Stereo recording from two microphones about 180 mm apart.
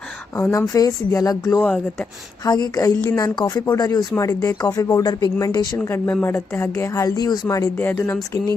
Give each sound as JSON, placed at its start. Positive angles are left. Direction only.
{"t": 0.3, "sound": "speech", "side_deg": 15}
{"t": 2.4, "sound": "a woman's voice", "side_deg": 20}